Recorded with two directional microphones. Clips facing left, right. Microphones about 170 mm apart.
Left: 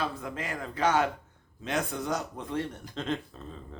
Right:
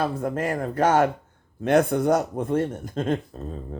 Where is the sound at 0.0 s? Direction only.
50° right (ahead or behind).